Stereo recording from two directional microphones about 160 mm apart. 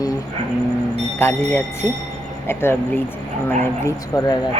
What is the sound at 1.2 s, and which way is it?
Speech, 15° left (ahead or behind).